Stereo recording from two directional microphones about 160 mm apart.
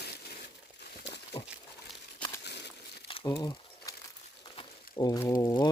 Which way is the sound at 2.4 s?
90° left.